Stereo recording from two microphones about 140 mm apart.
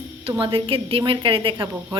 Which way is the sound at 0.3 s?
40° right (ahead or behind).